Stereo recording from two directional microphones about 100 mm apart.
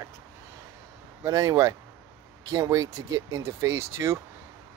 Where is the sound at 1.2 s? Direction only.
35° right (ahead or behind).